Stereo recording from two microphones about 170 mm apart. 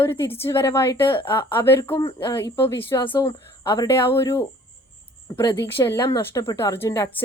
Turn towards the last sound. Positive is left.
turn(degrees=20)  # may be behind; listen again after turning